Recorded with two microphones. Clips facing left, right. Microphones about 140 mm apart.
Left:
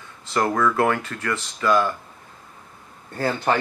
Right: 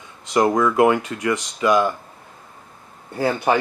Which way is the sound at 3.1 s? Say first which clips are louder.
Right 3 dB; 10° right (ahead or behind).